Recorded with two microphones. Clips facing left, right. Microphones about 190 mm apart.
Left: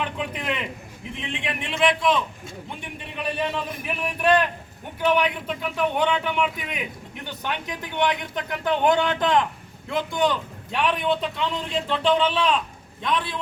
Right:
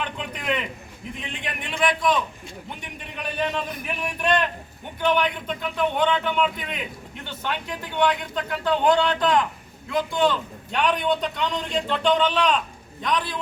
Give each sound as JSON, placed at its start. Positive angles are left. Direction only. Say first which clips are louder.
{"t": 0.0, "sound": "a sound", "louder": "left 2 dB", "side_deg": 5}
{"t": 1.6, "sound": "a man's voice", "louder": "left 1 dB", "side_deg": 0}
{"t": 3.2, "sound": "a man's voice", "louder": "even", "side_deg": 5}
{"t": 10.7, "sound": "a man's voice", "louder": "right 1 dB", "side_deg": 5}